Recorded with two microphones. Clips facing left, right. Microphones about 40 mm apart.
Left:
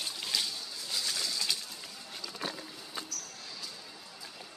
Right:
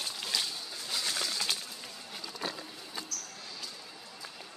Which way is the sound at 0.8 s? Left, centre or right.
Right.